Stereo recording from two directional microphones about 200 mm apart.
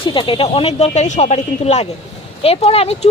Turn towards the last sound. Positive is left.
turn(degrees=30)  # may be behind; listen again after turning